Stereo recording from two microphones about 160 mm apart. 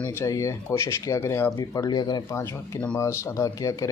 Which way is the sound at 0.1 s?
20° left (ahead or behind).